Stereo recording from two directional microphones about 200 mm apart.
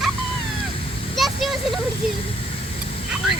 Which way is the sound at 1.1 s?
Centre (ahead or behind).